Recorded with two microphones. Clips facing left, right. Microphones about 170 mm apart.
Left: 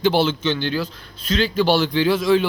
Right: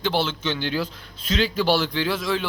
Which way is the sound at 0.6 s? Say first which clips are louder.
Left 2 dB; 15° right (ahead or behind).